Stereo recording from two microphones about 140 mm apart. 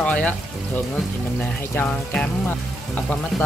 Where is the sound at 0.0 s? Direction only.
10° left (ahead or behind).